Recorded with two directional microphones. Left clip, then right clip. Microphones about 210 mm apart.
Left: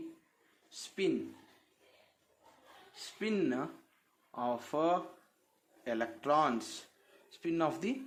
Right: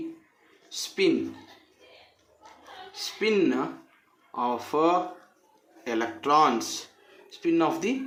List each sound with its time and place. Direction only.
0.7 s speech: 25° left (ahead or behind)
2.9 s speech: 30° left (ahead or behind)